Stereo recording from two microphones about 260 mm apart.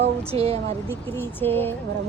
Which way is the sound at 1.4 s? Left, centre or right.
Centre.